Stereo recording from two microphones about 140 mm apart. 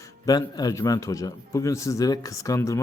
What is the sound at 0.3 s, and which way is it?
Speech, 30° left (ahead or behind).